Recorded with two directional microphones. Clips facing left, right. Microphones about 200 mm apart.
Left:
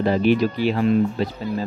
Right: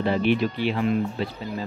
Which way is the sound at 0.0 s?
40° left (ahead or behind).